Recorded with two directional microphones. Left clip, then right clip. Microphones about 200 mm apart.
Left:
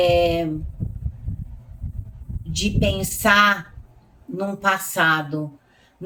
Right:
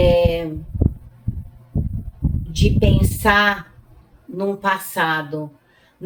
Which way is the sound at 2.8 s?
10° left (ahead or behind).